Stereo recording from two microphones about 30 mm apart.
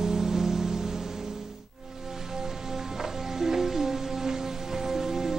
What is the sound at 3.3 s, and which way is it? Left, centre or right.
Music, centre.